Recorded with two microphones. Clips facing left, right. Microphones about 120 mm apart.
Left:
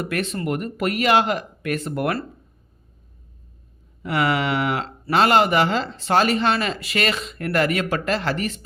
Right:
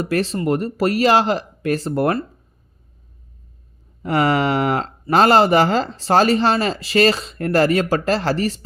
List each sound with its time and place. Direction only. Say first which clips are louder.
0.0 s speech: right 5 dB; 35° right (ahead or behind)
4.0 s speech: right 4 dB; 40° right (ahead or behind)